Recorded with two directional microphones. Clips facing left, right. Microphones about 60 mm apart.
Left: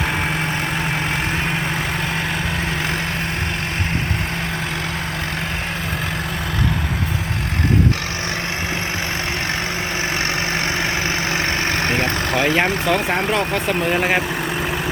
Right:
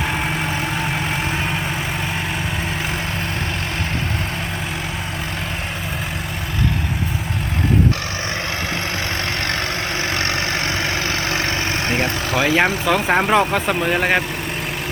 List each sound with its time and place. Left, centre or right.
11.3 s vehicle: left
12.4 s speech: centre